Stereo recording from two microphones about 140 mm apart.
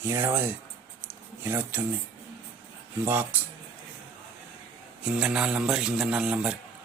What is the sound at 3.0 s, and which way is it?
Speech, 15° right (ahead or behind).